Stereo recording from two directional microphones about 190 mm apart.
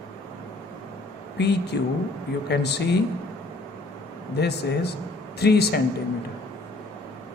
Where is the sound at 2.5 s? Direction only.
60° left (ahead or behind).